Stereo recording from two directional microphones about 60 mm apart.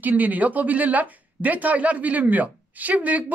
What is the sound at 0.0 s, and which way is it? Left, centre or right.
Speech, right.